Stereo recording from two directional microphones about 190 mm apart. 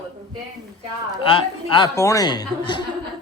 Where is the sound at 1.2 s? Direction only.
25° left (ahead or behind).